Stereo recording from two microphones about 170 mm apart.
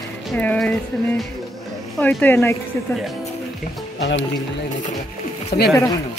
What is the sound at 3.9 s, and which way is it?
Speech, 90° left.